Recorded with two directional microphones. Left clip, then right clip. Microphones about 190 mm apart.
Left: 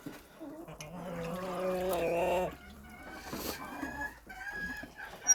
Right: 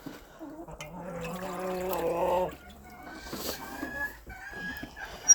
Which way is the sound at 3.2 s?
10° left (ahead or behind).